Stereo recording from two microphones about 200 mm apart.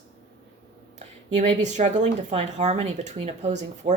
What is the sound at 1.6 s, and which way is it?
Speech, 35° right (ahead or behind).